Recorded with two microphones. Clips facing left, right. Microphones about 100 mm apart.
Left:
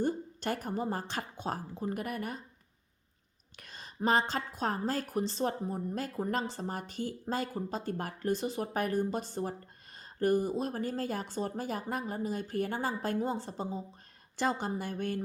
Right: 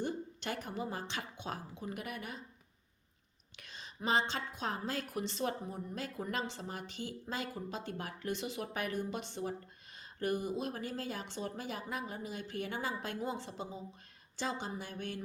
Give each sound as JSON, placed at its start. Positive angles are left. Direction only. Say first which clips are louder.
{"t": 0.0, "sound": "a woman's voice", "louder": "left 6 dB", "side_deg": 45}
{"t": 3.6, "sound": "a woman's voice", "louder": "left 8 dB", "side_deg": 45}
{"t": 14.3, "sound": "a woman's voice", "louder": "left 7 dB", "side_deg": 50}